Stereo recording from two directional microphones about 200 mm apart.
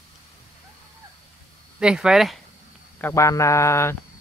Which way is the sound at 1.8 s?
5° right (ahead or behind).